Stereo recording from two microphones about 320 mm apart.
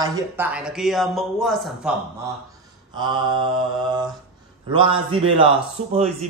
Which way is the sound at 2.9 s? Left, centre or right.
Centre.